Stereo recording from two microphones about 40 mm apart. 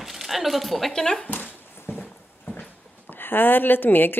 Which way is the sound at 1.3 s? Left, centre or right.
Left.